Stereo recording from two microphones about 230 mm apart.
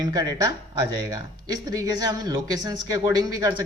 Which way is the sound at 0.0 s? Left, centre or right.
Centre.